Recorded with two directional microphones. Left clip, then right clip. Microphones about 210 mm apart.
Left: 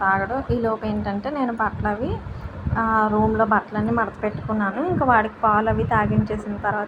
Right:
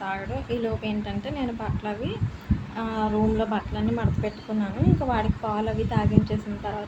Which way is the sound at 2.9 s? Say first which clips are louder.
Left 5 dB; 10° left (ahead or behind).